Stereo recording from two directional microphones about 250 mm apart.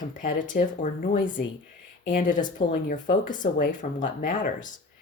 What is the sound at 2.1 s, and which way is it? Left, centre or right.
Speech, left.